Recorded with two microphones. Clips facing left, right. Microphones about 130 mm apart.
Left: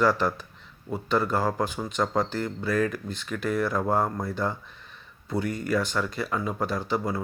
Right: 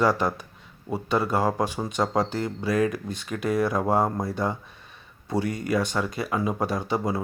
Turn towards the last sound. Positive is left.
turn(degrees=-15)  # may be behind; listen again after turning